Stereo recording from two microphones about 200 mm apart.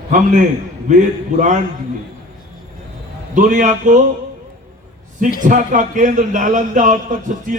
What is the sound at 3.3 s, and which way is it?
Speech, 40° right (ahead or behind).